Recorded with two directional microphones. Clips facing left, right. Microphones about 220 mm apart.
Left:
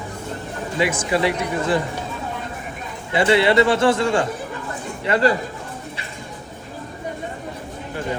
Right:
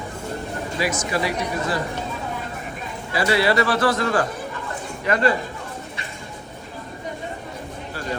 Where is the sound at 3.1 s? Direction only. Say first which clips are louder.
Left 4 dB; 25° left (ahead or behind).